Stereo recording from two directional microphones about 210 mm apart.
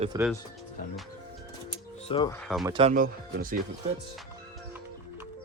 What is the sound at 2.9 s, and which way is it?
Speech, 40° right (ahead or behind).